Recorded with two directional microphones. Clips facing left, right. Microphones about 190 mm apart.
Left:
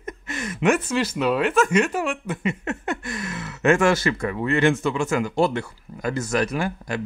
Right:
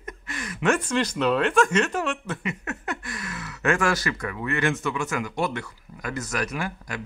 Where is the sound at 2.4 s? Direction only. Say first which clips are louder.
Left 5 dB; 25° left (ahead or behind).